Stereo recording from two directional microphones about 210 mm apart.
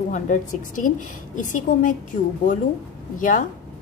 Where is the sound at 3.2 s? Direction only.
40° left (ahead or behind).